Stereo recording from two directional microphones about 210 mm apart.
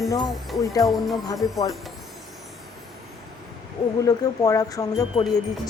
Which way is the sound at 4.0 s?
15° left (ahead or behind).